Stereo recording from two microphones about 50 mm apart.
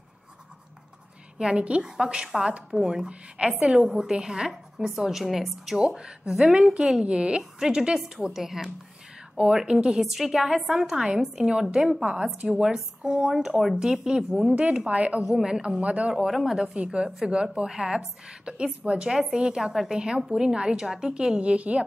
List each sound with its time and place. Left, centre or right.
1.4 s speech: right; by 5.8 s centre
5.8 s speech: centre
15.2 s speech: centre
15.8 s speech: right
16.3 s speech: centre
16.7 s speech: right